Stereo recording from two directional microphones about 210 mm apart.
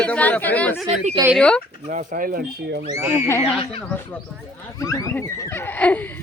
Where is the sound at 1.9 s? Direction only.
40° right (ahead or behind).